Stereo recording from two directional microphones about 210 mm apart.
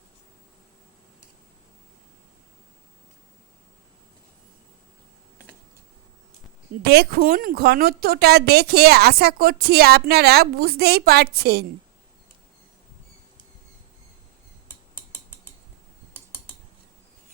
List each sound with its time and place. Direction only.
6.8 s a woman's voice: 50° right (ahead or behind)